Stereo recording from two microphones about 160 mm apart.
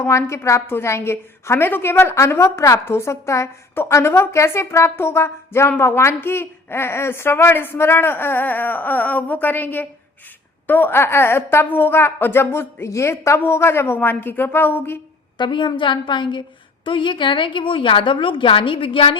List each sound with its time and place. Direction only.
0.0 s a woman's voice: 15° left (ahead or behind)
15.4 s a woman's voice: 30° left (ahead or behind)